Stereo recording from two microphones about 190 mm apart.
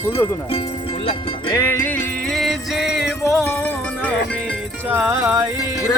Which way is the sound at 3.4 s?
10° left (ahead or behind).